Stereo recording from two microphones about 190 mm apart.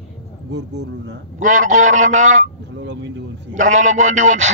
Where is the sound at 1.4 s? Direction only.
40° right (ahead or behind).